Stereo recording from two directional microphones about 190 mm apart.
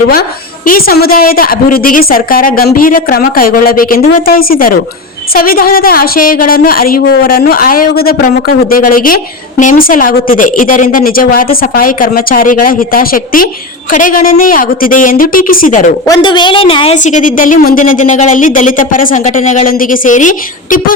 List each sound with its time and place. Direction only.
0.1 s a woman's voice: 50° left (ahead or behind)
16.0 s a woman's voice: 20° left (ahead or behind); by 20.9 s 45° left (ahead or behind)